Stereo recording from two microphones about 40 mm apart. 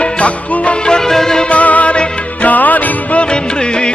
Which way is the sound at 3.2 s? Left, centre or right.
Left.